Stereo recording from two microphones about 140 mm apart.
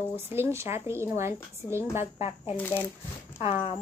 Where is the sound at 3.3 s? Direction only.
45° left (ahead or behind).